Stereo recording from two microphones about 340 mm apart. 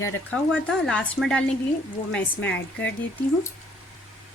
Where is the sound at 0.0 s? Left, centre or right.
Centre.